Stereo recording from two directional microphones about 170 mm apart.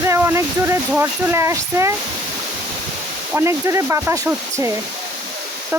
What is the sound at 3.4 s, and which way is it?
Speech, 15° right (ahead or behind).